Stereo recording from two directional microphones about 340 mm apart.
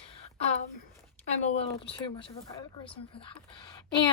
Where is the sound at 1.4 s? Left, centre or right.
Centre.